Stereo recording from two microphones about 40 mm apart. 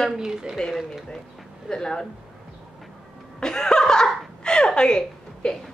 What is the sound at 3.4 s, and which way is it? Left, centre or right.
Laughter, centre.